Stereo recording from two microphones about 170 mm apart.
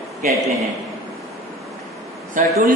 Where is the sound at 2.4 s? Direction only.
50° right (ahead or behind).